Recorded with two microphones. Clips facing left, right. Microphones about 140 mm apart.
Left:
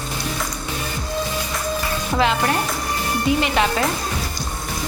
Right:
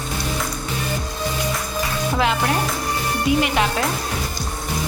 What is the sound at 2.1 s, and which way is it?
Speech, 5° right (ahead or behind).